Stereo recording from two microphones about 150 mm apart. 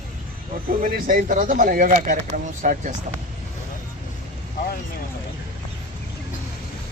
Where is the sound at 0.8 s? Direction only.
75° right (ahead or behind).